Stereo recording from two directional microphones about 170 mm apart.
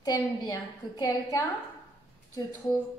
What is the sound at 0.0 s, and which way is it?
A woman's voice, 20° left (ahead or behind).